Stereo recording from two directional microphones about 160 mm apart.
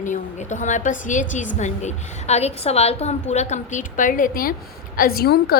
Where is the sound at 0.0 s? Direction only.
50° left (ahead or behind).